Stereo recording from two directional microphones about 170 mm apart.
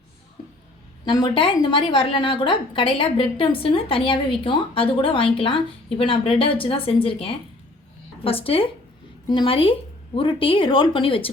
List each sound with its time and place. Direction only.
1.0 s a woman's voice: 25° left (ahead or behind)